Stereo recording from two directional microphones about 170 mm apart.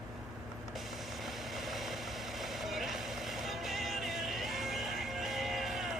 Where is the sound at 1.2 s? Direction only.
Centre (ahead or behind).